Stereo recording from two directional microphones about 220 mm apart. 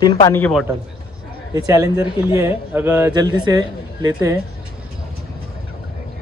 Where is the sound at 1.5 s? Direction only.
15° right (ahead or behind).